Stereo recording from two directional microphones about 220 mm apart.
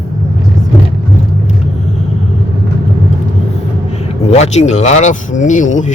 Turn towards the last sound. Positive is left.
turn(degrees=35)  # may be behind; listen again after turning